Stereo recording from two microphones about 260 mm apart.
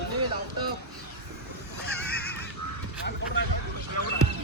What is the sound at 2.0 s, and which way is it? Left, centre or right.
Honk, left.